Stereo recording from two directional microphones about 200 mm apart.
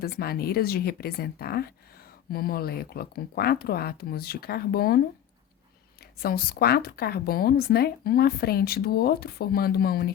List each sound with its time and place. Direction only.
0.0 s a woman's voice: 50° left (ahead or behind)
6.2 s a woman's voice: 50° left (ahead or behind)